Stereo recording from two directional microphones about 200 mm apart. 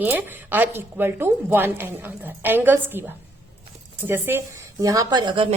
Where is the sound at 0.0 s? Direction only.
10° right (ahead or behind).